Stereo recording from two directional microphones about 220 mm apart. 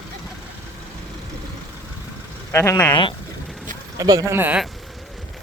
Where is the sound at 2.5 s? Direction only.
10° left (ahead or behind).